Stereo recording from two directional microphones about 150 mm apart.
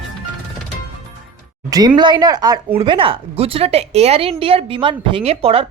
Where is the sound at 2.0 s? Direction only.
30° right (ahead or behind).